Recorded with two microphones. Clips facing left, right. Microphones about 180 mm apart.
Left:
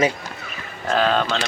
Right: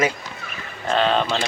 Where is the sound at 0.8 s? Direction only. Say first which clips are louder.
Even; centre (ahead or behind).